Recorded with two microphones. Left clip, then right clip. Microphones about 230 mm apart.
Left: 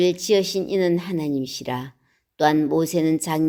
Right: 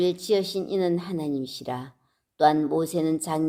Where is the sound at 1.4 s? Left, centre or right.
Left.